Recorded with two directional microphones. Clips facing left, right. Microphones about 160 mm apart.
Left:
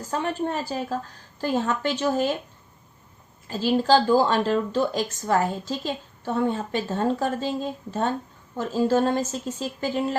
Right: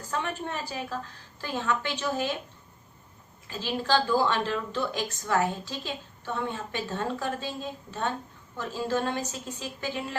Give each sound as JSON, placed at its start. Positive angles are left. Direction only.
{"t": 0.1, "sound": "a woman's voice", "side_deg": 40}
{"t": 3.4, "sound": "a woman's voice", "side_deg": 40}